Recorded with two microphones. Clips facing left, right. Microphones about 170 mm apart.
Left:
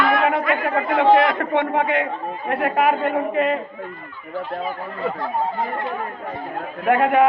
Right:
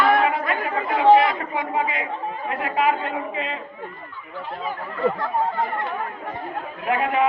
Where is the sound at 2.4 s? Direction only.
60° left (ahead or behind).